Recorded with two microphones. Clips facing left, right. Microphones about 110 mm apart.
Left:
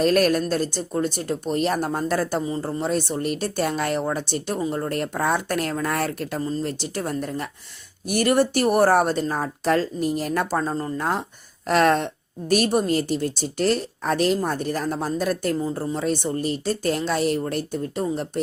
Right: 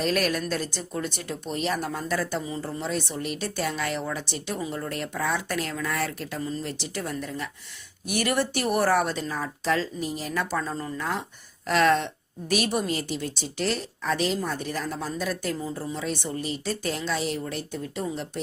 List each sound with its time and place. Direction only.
0.0 s speech: 45° left (ahead or behind)